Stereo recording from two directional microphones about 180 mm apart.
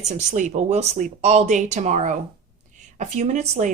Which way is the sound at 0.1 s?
45° right (ahead or behind).